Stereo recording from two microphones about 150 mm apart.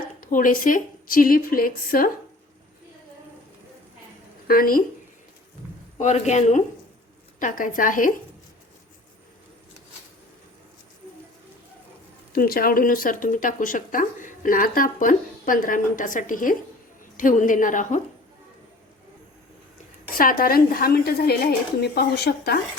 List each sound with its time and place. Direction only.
0.2 s a woman's voice: 60° left (ahead or behind)
4.4 s a woman's voice: 75° left (ahead or behind)
6.0 s speech: 50° left (ahead or behind)
7.3 s speech: 60° left (ahead or behind)
12.3 s speech: 75° left (ahead or behind); by 18.0 s 60° left (ahead or behind)
20.1 s a woman's voice: 75° left (ahead or behind); by 22.6 s 90° left